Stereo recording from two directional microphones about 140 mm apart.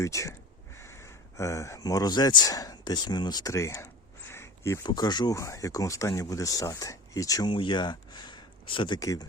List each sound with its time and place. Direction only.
0.0 s speech: 20° left (ahead or behind)